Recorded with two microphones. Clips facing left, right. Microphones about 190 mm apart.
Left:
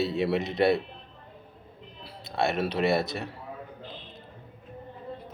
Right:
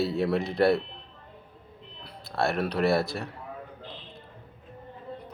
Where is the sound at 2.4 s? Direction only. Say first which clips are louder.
Even; 20° left (ahead or behind).